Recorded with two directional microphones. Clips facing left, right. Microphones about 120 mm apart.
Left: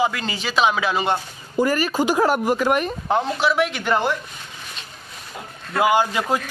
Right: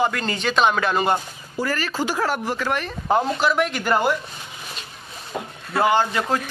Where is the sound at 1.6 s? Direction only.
15° left (ahead or behind).